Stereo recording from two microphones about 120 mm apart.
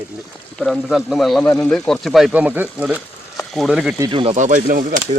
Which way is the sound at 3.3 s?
Centre (ahead or behind).